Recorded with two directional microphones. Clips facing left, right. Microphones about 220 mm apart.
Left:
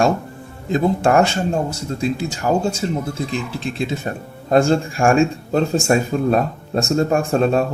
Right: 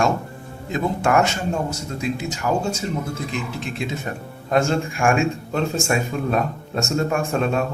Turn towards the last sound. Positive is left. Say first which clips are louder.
# left 5 dB
turn(degrees=35)  # may be behind; listen again after turning